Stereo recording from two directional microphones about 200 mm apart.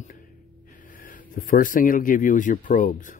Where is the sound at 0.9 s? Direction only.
45° left (ahead or behind).